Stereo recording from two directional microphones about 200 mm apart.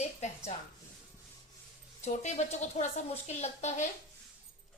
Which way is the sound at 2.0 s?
35° left (ahead or behind).